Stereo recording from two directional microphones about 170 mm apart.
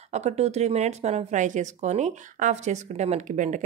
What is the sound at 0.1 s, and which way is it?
Speech, 40° right (ahead or behind).